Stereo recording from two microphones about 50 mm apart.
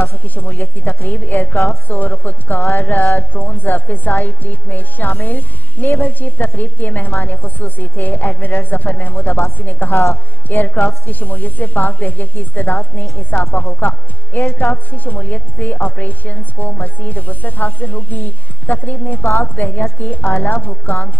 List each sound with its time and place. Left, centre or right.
0.0 s a woman's voice: left